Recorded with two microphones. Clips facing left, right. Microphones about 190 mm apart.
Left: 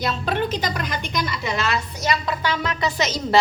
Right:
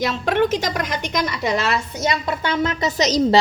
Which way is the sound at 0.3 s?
90° right.